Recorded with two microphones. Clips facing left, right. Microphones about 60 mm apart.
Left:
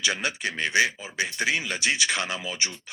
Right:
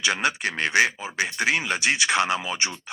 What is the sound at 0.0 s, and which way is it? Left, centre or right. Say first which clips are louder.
Speech: right 4 dB; right.